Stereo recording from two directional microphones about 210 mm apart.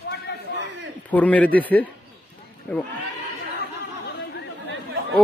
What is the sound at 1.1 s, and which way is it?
A man's voice, 5° left (ahead or behind).